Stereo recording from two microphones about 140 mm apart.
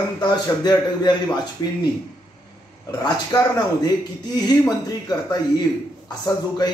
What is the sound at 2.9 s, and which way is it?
A man's voice, 30° left (ahead or behind).